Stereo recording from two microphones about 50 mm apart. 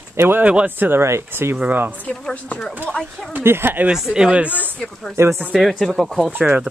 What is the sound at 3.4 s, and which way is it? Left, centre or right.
Speech, right.